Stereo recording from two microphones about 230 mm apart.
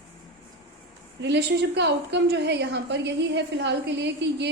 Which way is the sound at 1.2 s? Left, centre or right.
Right.